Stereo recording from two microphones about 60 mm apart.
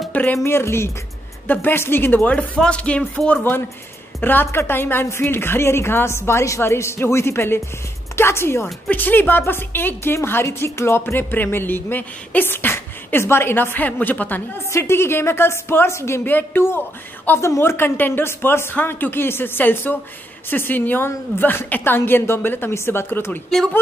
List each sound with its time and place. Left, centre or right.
0.1 s a sound: left
0.4 s a woman's voice: left
1.5 s speech: left
2.2 s speech: left
4.2 s a woman's voice: left
8.9 s speech: left
14.7 s a woman's voice: left
16.3 s speech: left